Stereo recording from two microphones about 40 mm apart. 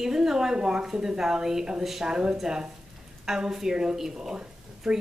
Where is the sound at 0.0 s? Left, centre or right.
Centre.